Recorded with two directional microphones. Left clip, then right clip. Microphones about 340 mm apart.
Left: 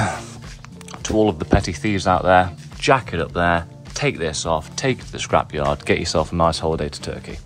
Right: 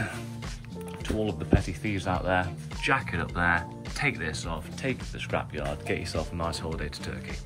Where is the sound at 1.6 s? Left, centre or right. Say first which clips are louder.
Left 12 dB; left.